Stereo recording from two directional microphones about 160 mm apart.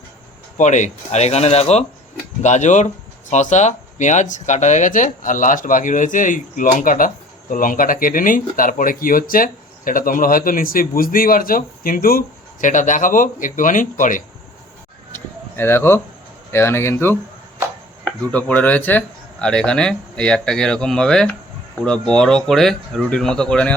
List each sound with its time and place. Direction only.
0.5 s speech: 50° left (ahead or behind)
15.1 s a sound: 15° left (ahead or behind)
16.5 s speech: 15° left (ahead or behind)
18.3 s speech: 10° left (ahead or behind)